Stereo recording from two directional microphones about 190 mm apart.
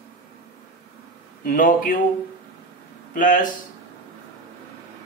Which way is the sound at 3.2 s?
45° left (ahead or behind).